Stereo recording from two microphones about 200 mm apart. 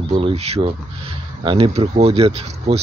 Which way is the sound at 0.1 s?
30° right (ahead or behind).